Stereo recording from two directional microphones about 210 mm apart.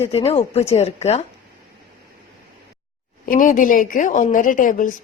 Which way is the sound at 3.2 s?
40° left (ahead or behind).